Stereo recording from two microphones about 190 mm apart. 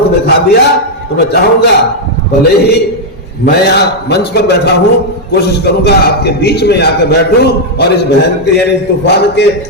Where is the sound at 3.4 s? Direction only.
60° left (ahead or behind).